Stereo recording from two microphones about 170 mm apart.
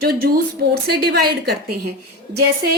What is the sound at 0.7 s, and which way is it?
Speech, 65° right (ahead or behind).